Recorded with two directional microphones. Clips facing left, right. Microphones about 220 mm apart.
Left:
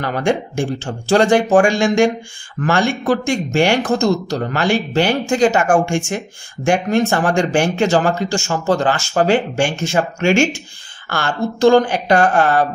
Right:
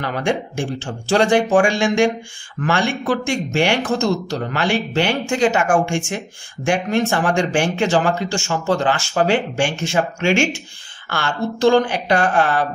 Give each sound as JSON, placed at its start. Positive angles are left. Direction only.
{"t": 0.0, "sound": "speech", "side_deg": 45}